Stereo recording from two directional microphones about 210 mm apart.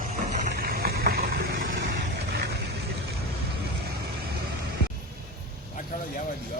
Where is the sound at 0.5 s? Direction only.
45° right (ahead or behind).